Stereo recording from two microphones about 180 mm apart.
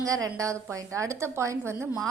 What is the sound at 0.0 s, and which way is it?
A woman's voice, 20° right (ahead or behind).